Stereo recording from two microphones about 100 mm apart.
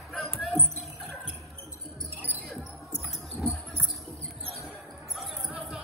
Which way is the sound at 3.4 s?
Centre (ahead or behind).